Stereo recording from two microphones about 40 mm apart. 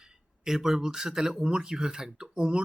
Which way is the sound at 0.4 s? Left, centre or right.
Centre.